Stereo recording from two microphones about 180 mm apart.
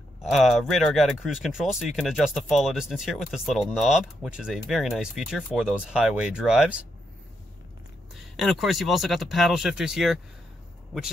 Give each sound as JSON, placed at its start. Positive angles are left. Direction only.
{"t": 0.3, "sound": "speech", "side_deg": 0}
{"t": 8.1, "sound": "speech", "side_deg": 0}